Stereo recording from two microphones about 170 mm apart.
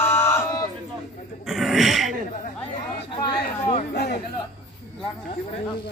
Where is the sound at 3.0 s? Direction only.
30° left (ahead or behind).